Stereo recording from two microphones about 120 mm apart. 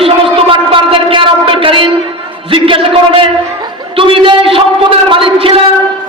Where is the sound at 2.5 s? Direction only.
45° right (ahead or behind).